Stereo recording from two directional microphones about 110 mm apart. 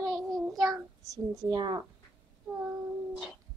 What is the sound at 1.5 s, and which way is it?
Speech, 45° right (ahead or behind).